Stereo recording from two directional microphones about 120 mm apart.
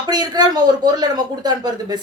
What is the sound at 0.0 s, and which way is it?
Speech, 35° right (ahead or behind).